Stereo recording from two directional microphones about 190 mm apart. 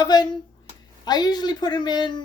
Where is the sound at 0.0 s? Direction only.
20° left (ahead or behind).